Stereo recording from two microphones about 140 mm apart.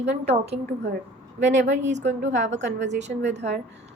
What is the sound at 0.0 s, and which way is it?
A woman's voice, 50° right (ahead or behind).